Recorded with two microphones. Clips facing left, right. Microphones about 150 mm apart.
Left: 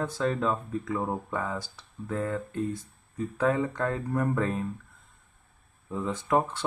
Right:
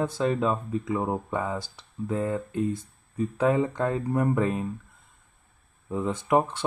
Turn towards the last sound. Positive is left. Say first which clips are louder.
# right 3 dB
turn(degrees=-15)  # may be behind; listen again after turning